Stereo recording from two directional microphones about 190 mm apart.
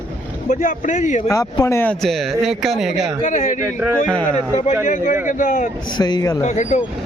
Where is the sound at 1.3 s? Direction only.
15° left (ahead or behind); by 3.1 s centre (ahead or behind).